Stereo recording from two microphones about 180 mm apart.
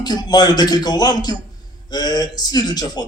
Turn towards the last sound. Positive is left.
turn(degrees=20)  # may be behind; listen again after turning